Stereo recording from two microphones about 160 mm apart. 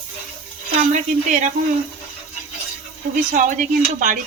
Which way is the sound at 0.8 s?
55° right (ahead or behind).